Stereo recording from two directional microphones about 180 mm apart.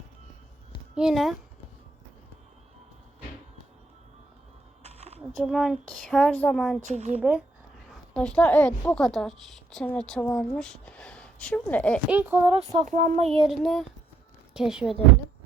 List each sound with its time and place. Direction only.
0.9 s a woman's voice: centre (ahead or behind)
4.8 s a sound: 35° right (ahead or behind)
5.4 s a woman's voice: centre (ahead or behind)
12.0 s speech: 10° right (ahead or behind)
12.7 s speech: 40° right (ahead or behind)
13.4 s a woman's voice: centre (ahead or behind)